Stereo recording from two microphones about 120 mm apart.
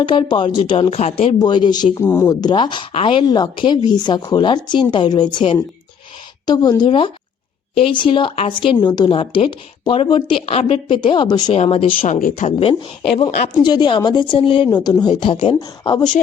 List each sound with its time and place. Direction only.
0.0 s speech: 40° left (ahead or behind)
1.4 s speech: 35° left (ahead or behind)
2.0 s a woman's voice: 20° left (ahead or behind)
2.3 s speech: 35° left (ahead or behind)
11.5 s speech: 60° left (ahead or behind)
12.5 s speech: 50° left (ahead or behind)
13.7 s speech: 40° left (ahead or behind)